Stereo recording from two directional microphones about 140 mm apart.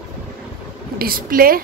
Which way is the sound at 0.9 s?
90° right.